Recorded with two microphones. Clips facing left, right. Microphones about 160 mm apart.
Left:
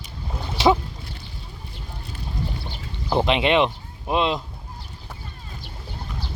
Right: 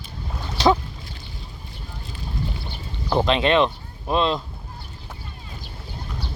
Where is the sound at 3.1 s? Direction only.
15° left (ahead or behind).